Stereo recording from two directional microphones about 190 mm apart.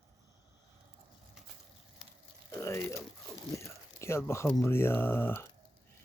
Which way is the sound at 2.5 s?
15° left (ahead or behind).